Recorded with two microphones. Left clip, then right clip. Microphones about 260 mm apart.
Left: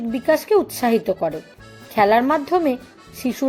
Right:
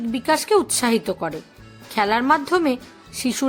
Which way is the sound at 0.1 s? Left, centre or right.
Centre.